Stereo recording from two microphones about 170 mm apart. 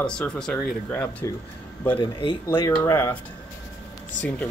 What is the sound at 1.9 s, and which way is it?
Speech, 30° left (ahead or behind).